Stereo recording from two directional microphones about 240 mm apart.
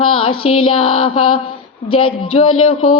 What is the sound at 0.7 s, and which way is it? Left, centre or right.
Speech, left.